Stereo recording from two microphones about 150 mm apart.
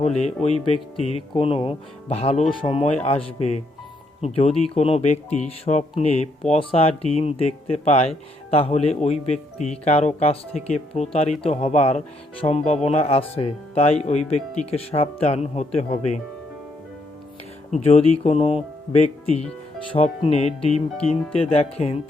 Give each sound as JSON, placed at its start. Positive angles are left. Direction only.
{"t": 0.4, "sound": "speech", "side_deg": 45}
{"t": 17.7, "sound": "speech", "side_deg": 45}